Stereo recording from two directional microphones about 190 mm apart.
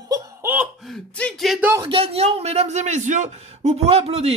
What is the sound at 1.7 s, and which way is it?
A man's voice, 25° right (ahead or behind).